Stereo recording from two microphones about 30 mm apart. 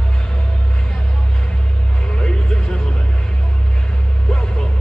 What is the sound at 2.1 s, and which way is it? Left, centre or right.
Music, left.